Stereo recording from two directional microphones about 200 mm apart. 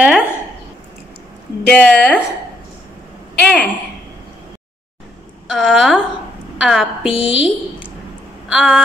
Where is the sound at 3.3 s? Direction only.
5° left (ahead or behind).